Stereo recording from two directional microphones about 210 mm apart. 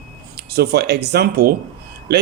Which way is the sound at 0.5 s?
50° right (ahead or behind).